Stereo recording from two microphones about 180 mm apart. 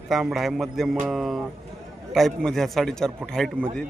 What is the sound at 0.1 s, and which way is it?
A man's voice, centre (ahead or behind).